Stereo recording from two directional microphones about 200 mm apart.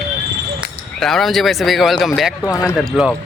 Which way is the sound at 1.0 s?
Centre (ahead or behind).